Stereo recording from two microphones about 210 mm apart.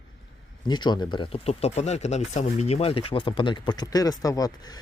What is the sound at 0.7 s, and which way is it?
Speech, 20° left (ahead or behind).